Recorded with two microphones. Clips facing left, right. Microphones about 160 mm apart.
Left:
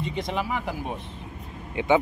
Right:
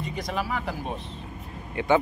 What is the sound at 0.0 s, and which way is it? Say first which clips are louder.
Speech: left 2 dB; 25° left (ahead or behind).